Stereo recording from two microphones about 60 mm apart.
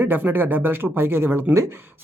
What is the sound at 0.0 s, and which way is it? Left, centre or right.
Speech, right.